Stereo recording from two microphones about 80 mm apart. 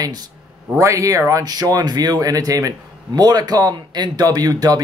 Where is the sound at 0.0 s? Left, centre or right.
Right.